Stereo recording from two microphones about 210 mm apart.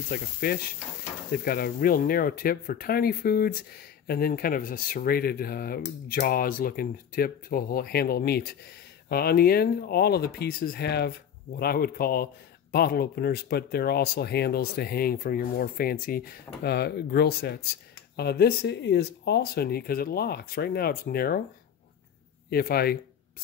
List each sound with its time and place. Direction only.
0.1 s speech: 45° left (ahead or behind)
22.5 s speech: 50° left (ahead or behind)